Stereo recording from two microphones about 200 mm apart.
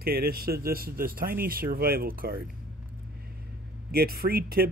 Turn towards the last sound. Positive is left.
turn(degrees=-50)  # may be behind; listen again after turning